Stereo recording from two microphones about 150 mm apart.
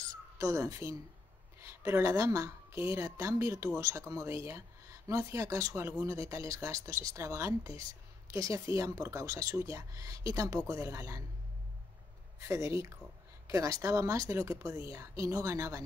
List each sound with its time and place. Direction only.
0.4 s a woman's voice: 20° right (ahead or behind)
12.4 s a woman's voice: 20° right (ahead or behind)